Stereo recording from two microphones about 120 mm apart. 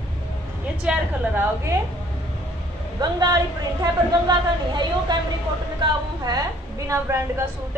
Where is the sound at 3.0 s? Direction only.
35° right (ahead or behind).